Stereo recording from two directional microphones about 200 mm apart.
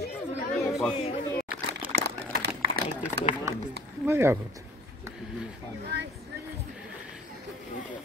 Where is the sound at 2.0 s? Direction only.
50° right (ahead or behind).